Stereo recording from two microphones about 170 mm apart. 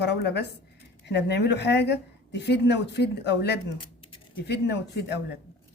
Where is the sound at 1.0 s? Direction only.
90° left.